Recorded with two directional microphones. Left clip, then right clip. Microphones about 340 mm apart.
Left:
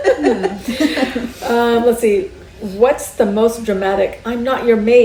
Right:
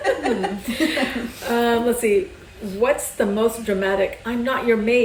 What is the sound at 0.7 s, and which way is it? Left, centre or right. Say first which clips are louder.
Speech: left 4 dB; centre.